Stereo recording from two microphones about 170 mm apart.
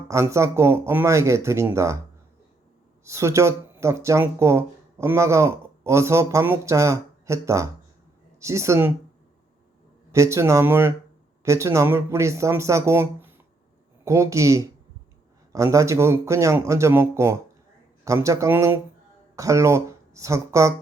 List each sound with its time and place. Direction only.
0.1 s speech: 15° right (ahead or behind)
3.0 s speech: 15° right (ahead or behind)
10.1 s speech: 15° right (ahead or behind)